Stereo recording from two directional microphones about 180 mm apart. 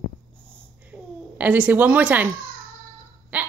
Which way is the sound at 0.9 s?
10° right (ahead or behind).